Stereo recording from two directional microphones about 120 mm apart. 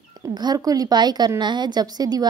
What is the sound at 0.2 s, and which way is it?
A woman's voice, 35° right (ahead or behind).